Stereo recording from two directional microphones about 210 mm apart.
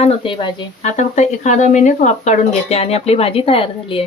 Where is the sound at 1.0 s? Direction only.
35° left (ahead or behind).